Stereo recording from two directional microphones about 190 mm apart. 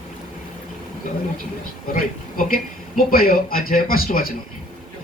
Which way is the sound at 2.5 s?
50° left (ahead or behind).